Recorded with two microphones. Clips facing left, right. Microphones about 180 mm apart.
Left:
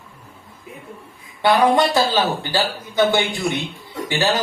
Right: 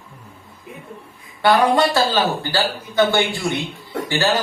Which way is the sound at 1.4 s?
20° left (ahead or behind).